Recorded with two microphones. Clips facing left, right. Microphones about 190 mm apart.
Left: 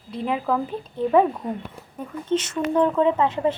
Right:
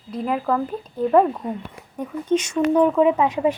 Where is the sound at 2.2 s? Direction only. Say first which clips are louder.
Right 4 dB; 10° right (ahead or behind).